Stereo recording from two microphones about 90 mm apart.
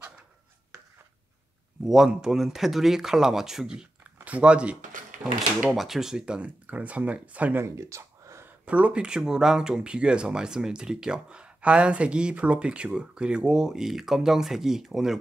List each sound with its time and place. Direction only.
1.8 s speech: 5° right (ahead or behind)
7.6 s gasp: 35° right (ahead or behind)
8.6 s speech: 15° right (ahead or behind)